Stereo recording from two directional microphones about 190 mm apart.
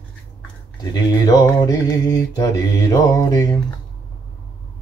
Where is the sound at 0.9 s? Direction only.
20° left (ahead or behind).